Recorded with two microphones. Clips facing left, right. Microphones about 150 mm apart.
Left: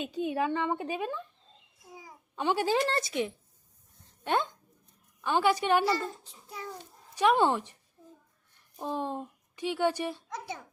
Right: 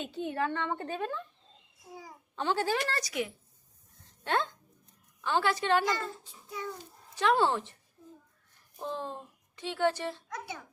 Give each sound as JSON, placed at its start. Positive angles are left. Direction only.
{"t": 0.0, "sound": "a woman's voice", "side_deg": 15}
{"t": 4.2, "sound": "a woman's voice", "side_deg": 15}
{"t": 7.2, "sound": "a woman's voice", "side_deg": 15}
{"t": 8.8, "sound": "a woman's voice", "side_deg": 15}